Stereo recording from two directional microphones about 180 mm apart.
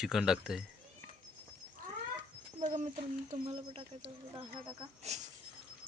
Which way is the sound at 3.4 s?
30° right (ahead or behind).